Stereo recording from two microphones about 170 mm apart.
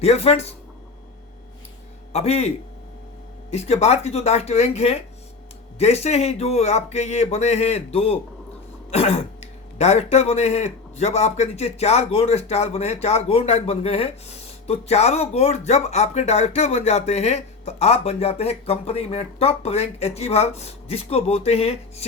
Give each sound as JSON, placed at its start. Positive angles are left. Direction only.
{"t": 0.0, "sound": "speech", "side_deg": 35}
{"t": 2.1, "sound": "speech", "side_deg": 40}
{"t": 3.5, "sound": "speech", "side_deg": 40}